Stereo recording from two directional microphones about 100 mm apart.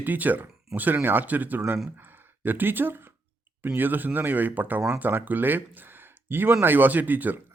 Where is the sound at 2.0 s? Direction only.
20° right (ahead or behind).